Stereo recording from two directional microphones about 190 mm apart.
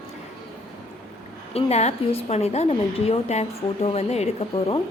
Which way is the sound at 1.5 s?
35° left (ahead or behind).